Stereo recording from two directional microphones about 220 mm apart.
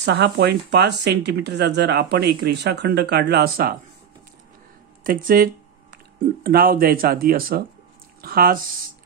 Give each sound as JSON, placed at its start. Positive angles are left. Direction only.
{"t": 0.0, "sound": "speech", "side_deg": -50}
{"t": 5.0, "sound": "speech", "side_deg": -40}